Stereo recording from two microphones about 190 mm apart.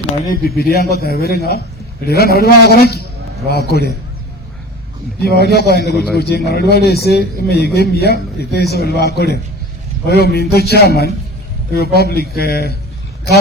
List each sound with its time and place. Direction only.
0.3 s a man's voice: 55° left (ahead or behind)
5.2 s a man's voice: 55° left (ahead or behind)